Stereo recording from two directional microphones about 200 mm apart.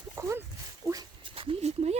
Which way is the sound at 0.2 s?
15° right (ahead or behind).